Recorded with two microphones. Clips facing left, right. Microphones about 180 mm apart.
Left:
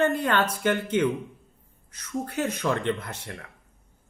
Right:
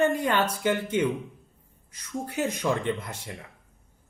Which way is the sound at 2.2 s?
10° right (ahead or behind).